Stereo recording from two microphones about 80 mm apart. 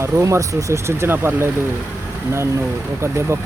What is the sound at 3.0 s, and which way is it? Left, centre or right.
Speech, right.